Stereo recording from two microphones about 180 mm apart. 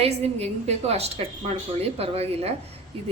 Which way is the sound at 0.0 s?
35° right (ahead or behind).